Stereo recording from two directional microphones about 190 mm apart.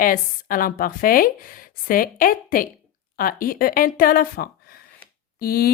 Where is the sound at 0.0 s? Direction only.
50° left (ahead or behind).